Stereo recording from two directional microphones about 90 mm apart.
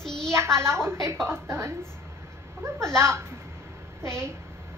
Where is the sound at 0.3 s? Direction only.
30° right (ahead or behind).